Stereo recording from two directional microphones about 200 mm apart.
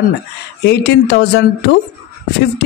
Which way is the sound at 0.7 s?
55° left (ahead or behind).